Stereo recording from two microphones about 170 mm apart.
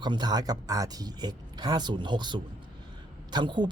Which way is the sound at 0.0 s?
25° right (ahead or behind).